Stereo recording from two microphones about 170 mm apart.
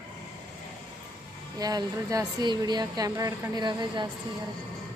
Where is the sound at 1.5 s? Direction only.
20° right (ahead or behind).